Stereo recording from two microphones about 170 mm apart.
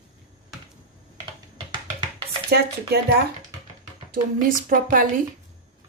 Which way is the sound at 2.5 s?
65° right (ahead or behind).